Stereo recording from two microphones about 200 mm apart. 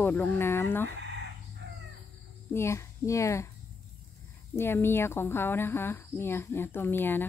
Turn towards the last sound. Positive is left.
turn(degrees=10)  # may be behind; listen again after turning